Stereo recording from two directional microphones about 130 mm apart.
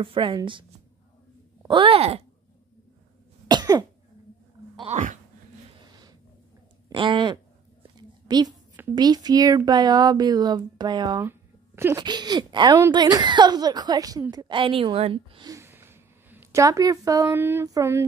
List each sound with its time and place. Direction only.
0.0 s speech: 40° right (ahead or behind)
1.7 s speech: 45° right (ahead or behind)
3.4 s cough: 30° right (ahead or behind)
4.8 s a sound: 70° right (ahead or behind)
6.9 s a woman's voice: 40° right (ahead or behind)
11.2 s a sound: 20° right (ahead or behind)
12.0 s speech: 35° right (ahead or behind)
15.4 s a sound: 20° right (ahead or behind)
16.6 s a woman's voice: 25° right (ahead or behind)